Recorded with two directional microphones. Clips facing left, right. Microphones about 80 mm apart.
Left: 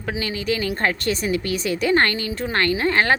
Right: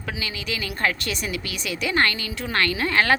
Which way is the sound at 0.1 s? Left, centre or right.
Left.